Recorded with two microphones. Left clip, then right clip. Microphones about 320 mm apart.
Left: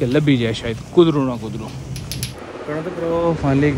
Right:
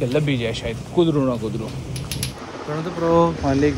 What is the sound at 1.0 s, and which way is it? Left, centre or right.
Speech, centre.